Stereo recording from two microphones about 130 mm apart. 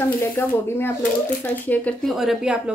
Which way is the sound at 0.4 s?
15° left (ahead or behind).